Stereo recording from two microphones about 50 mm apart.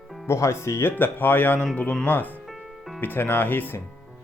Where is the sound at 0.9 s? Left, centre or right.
Left.